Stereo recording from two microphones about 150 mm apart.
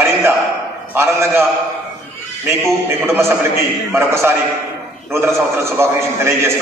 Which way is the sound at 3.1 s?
15° right (ahead or behind).